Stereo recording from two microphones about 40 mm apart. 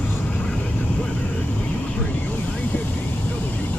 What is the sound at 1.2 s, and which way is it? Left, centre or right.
Vehicle, left.